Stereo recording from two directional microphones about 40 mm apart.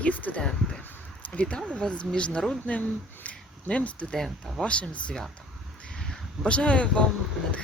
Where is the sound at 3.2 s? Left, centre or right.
Left.